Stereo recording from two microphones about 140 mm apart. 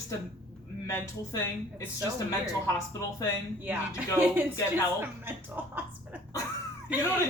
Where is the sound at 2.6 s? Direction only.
25° left (ahead or behind).